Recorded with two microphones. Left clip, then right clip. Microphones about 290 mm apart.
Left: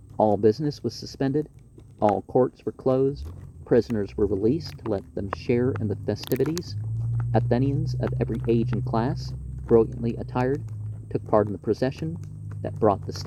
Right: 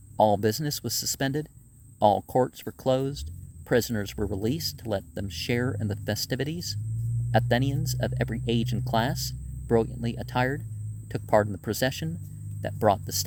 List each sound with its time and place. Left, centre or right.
0.2 s speech: right
7.3 s speech: right